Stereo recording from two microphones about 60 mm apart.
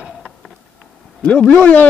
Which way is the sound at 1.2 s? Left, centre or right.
Centre.